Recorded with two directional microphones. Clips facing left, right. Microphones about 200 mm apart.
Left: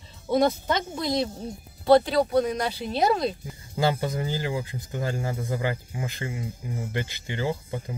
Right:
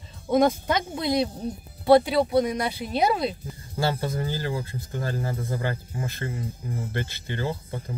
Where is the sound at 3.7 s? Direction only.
15° left (ahead or behind).